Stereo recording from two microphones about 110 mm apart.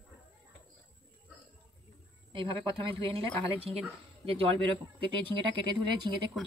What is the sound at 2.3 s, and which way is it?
Speech, 50° right (ahead or behind).